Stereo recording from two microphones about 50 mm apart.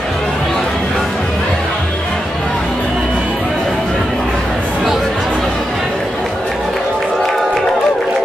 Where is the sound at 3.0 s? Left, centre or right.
Right.